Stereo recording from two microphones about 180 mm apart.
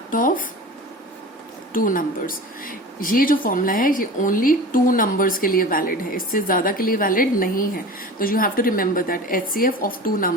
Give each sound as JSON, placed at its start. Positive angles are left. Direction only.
{"t": 0.1, "sound": "speech", "side_deg": 50}
{"t": 1.7, "sound": "speech", "side_deg": 50}